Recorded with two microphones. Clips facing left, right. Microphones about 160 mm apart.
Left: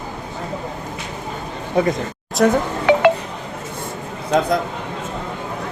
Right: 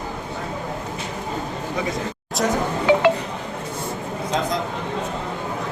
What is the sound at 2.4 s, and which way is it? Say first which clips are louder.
Speech: left 5 dB; 65° left (ahead or behind).